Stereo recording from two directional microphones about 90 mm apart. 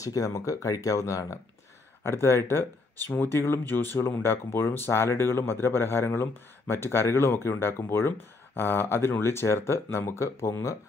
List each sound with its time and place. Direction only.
0.0 s speech: 40° left (ahead or behind)